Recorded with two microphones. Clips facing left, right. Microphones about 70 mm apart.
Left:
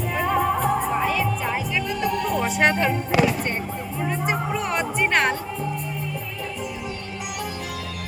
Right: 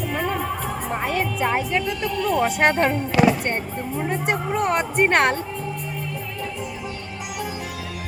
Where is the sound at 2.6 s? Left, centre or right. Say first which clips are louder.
Even; right.